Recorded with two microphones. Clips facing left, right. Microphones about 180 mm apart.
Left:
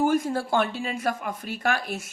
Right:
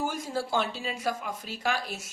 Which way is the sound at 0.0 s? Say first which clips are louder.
Left 8 dB; 55° left (ahead or behind).